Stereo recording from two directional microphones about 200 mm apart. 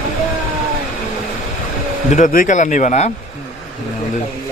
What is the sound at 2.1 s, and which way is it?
Speech, 40° left (ahead or behind).